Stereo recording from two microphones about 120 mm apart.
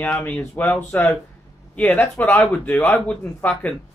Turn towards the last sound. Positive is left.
turn(degrees=10)  # may be behind; listen again after turning